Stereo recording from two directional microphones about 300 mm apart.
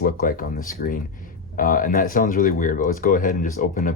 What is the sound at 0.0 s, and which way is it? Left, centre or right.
Speech, left.